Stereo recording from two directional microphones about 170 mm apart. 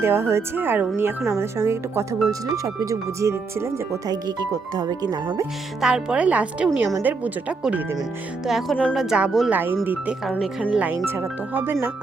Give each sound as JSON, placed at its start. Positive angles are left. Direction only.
{"t": 0.0, "sound": "speech", "side_deg": -15}
{"t": 5.8, "sound": "a woman's voice", "side_deg": -5}
{"t": 9.0, "sound": "speech", "side_deg": -5}